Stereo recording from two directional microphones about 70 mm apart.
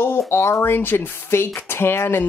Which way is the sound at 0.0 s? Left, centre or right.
Left.